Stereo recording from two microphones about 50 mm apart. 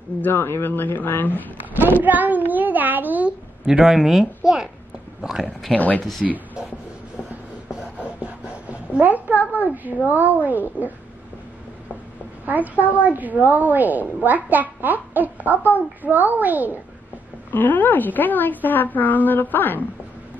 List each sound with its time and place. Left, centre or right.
0.2 s speech: left
1.8 s a woman's voice: right
3.3 s a child's voice: right
3.8 s a woman's voice: centre
5.8 s a woman's voice: left
8.0 s a sound: right
9.5 s a woman's voice: right
12.4 s a woman's voice: right
17.5 s a woman's voice: left